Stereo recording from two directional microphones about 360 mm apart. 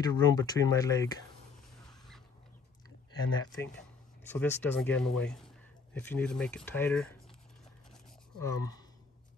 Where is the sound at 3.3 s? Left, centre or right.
Centre.